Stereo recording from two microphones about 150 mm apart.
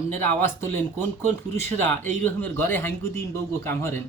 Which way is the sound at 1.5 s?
10° left (ahead or behind).